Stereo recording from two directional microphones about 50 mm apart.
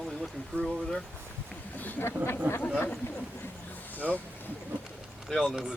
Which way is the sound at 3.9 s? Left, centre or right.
Left.